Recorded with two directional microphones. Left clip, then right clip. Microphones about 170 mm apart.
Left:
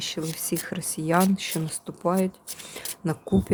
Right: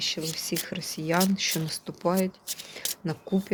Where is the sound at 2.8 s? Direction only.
20° left (ahead or behind).